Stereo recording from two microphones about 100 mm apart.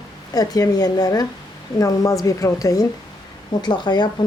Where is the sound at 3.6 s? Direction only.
45° left (ahead or behind).